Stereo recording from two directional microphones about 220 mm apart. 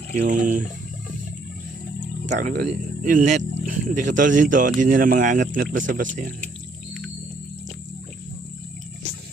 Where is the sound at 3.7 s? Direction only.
35° right (ahead or behind).